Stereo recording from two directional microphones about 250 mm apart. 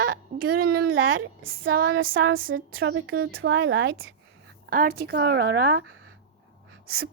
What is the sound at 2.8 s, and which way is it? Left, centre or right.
Speech, right.